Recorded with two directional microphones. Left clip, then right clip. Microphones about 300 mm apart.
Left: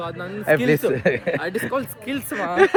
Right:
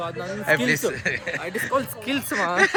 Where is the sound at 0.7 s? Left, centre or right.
Centre.